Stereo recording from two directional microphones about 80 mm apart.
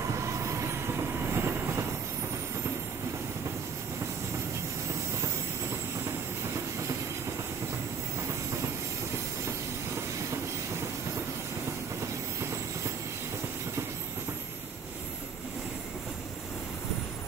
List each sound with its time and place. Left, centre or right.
0.1 s train: right